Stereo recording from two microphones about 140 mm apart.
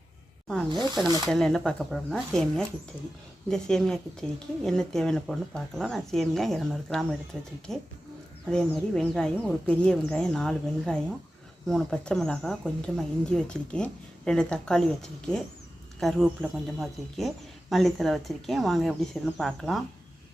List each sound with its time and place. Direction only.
0.4 s speech: 5° left (ahead or behind)
0.7 s speech: 30° right (ahead or behind)
1.3 s speech: 5° left (ahead or behind)